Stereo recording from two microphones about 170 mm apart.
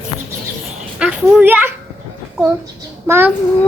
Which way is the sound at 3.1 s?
15° right (ahead or behind).